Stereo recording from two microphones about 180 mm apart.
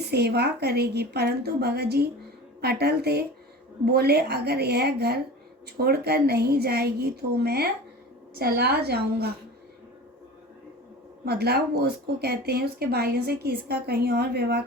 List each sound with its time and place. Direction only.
0.1 s speech: 65° right (ahead or behind)
11.3 s speech: 60° right (ahead or behind)